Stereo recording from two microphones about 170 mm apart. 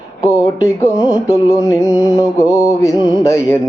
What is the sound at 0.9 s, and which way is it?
Speech, 20° left (ahead or behind).